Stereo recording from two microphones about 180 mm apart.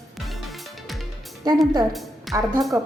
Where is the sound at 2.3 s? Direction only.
15° right (ahead or behind).